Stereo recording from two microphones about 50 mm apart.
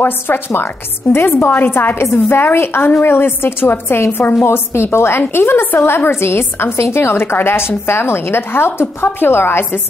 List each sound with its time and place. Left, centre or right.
0.0 s a woman's voice: left